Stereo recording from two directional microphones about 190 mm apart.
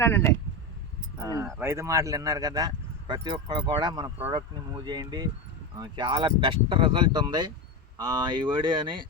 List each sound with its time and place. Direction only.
0.0 s speech: 15° left (ahead or behind)
1.6 s speech: 15° right (ahead or behind)